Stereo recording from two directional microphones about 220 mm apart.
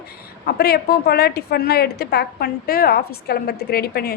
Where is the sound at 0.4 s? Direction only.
45° left (ahead or behind).